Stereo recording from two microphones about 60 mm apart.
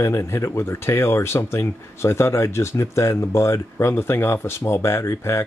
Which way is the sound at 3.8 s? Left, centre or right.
Left.